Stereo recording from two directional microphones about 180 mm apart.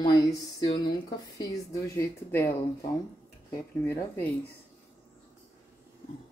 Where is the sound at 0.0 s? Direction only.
20° left (ahead or behind).